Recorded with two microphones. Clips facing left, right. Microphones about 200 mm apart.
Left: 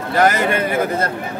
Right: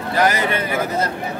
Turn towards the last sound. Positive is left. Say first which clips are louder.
# left 3 dB
turn(degrees=50)  # may be behind; listen again after turning